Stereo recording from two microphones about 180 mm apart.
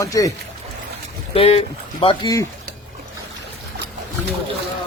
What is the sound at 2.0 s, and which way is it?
Speech, 20° left (ahead or behind).